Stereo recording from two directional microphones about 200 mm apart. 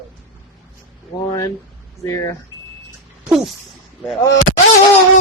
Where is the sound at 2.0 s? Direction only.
15° left (ahead or behind).